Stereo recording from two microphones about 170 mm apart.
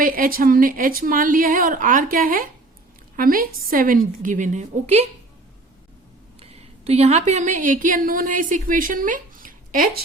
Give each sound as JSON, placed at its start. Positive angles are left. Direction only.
{"t": 0.0, "sound": "a woman's voice", "side_deg": -55}
{"t": 6.4, "sound": "a woman's voice", "side_deg": -35}